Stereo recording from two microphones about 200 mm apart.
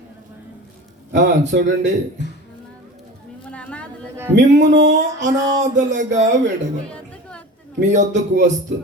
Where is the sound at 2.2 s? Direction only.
60° left (ahead or behind).